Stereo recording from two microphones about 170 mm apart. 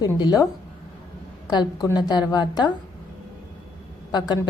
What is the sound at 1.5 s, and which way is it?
A woman's voice, 25° left (ahead or behind).